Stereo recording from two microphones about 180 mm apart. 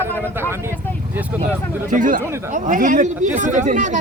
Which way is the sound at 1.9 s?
45° right (ahead or behind).